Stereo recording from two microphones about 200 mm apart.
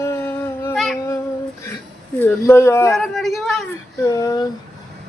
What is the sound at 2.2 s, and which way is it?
Speech, 10° left (ahead or behind).